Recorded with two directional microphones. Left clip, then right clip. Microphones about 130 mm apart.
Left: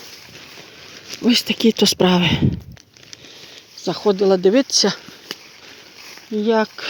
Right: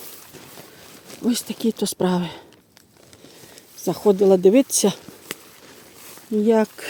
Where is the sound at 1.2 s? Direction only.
20° left (ahead or behind).